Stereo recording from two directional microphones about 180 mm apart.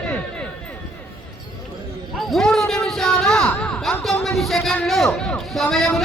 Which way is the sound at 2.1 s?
Centre (ahead or behind).